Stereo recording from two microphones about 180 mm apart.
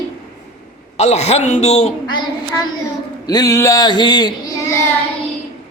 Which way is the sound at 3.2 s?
20° left (ahead or behind).